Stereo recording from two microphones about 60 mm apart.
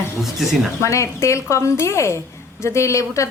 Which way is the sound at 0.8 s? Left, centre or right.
Left.